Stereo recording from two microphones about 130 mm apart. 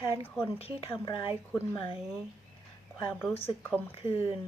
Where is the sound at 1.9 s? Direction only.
5° right (ahead or behind).